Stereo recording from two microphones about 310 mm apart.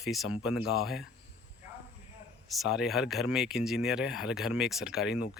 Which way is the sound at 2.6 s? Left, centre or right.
Centre.